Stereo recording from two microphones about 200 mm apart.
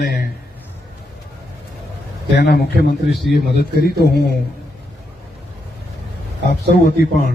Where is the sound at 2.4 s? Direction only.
50° left (ahead or behind).